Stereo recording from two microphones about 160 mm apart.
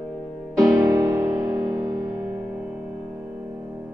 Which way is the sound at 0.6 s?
25° right (ahead or behind).